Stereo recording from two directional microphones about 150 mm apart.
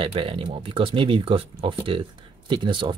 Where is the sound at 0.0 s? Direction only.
35° right (ahead or behind).